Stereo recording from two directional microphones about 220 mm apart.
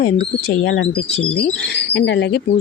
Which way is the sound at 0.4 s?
55° left (ahead or behind).